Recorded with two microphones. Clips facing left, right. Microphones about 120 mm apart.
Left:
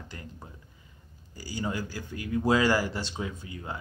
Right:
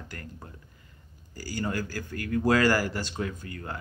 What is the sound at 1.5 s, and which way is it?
A man's voice, 15° left (ahead or behind).